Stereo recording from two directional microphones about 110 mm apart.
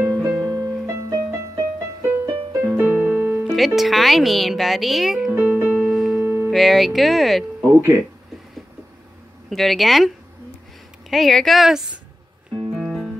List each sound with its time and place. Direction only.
0.0 s music: 15° right (ahead or behind); by 2.6 s 30° right (ahead or behind)
2.6 s piano: 15° right (ahead or behind)
3.4 s speech: centre (ahead or behind)
5.4 s music: 15° right (ahead or behind)
6.1 s music: 20° right (ahead or behind)
6.5 s speech: centre (ahead or behind)
9.5 s speech: centre (ahead or behind)
12.7 s music: centre (ahead or behind)